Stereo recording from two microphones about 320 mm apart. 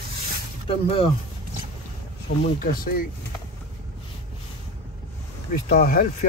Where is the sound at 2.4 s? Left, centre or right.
Left.